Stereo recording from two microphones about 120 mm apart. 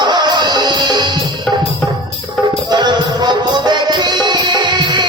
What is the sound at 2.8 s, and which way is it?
Music, 40° right (ahead or behind).